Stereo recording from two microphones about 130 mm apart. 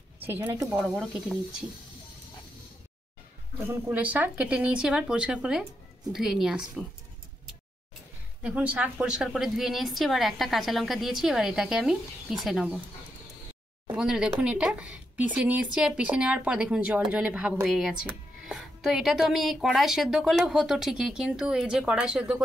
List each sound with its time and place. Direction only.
0.2 s speech: 15° right (ahead or behind)
0.7 s speech: 5° right (ahead or behind)
3.9 s a woman's voice: 10° right (ahead or behind)
8.4 s a woman's voice: 10° right (ahead or behind)
13.8 s a woman's voice: 5° right (ahead or behind)